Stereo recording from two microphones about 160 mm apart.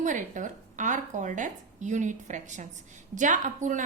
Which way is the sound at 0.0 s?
55° right (ahead or behind).